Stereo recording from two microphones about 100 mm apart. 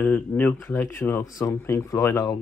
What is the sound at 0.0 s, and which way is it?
Speech, 20° left (ahead or behind).